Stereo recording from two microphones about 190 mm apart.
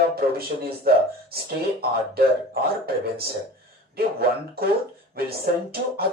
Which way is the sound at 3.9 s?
55° right (ahead or behind).